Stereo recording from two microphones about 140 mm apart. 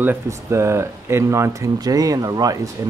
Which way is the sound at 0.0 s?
15° right (ahead or behind).